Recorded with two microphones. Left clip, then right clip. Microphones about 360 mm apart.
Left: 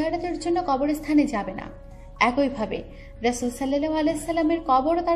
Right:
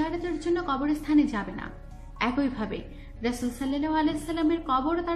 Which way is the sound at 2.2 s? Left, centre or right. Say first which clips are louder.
Left 5 dB; left.